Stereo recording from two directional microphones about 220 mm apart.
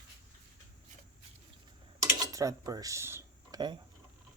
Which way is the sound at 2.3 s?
15° right (ahead or behind).